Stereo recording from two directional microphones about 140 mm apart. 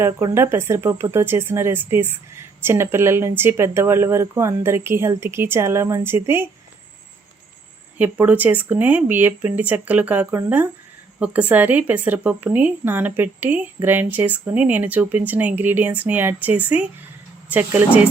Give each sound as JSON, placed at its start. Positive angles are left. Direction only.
{"t": 0.0, "sound": "speech", "side_deg": -20}
{"t": 7.9, "sound": "speech", "side_deg": -10}